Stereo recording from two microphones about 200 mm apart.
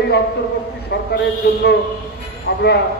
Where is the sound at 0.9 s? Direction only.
55° left (ahead or behind).